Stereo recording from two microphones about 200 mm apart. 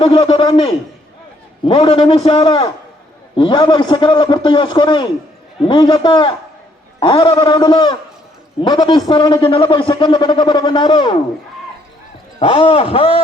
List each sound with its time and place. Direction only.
0.0 s a man's voice: 25° left (ahead or behind)
12.4 s a man's voice: 30° left (ahead or behind)